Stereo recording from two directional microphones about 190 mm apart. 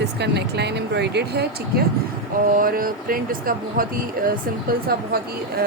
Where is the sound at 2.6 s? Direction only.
50° right (ahead or behind).